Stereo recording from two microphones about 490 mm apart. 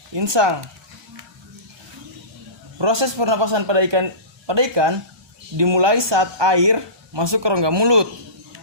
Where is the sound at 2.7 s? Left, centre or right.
Right.